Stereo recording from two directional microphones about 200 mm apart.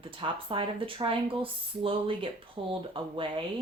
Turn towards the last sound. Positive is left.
turn(degrees=-25)  # may be behind; listen again after turning